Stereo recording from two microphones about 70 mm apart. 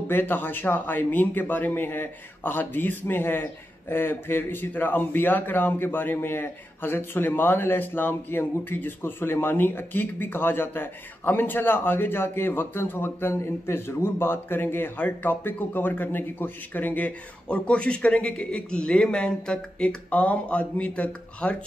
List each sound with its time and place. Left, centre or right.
0.1 s a man's voice: left